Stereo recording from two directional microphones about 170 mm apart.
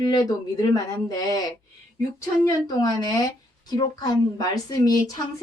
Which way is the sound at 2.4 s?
25° left (ahead or behind).